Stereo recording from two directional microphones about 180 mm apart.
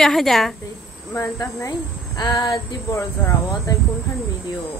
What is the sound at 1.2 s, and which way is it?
Speech, 20° left (ahead or behind).